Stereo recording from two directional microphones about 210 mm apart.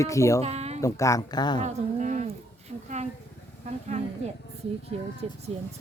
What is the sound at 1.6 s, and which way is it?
Speech, 35° right (ahead or behind).